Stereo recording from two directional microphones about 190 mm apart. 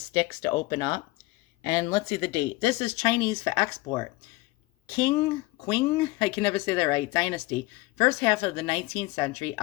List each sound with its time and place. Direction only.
0.1 s speech: 20° left (ahead or behind)